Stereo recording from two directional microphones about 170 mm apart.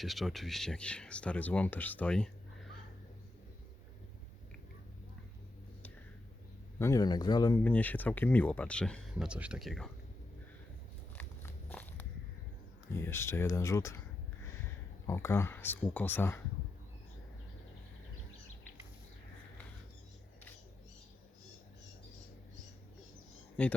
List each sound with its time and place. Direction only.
0.0 s speech: centre (ahead or behind)
6.7 s a man's voice: 20° left (ahead or behind)
7.6 s speech: 10° left (ahead or behind)
11.2 s walk: 10° left (ahead or behind)
12.9 s speech: 15° left (ahead or behind)
15.0 s speech: 15° left (ahead or behind)
23.6 s speech: 10° left (ahead or behind)